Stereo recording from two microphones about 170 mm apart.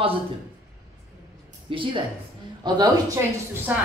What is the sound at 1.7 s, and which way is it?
A woman's voice, 30° right (ahead or behind).